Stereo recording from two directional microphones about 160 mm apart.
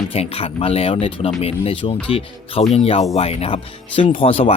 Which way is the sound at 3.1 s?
40° left (ahead or behind).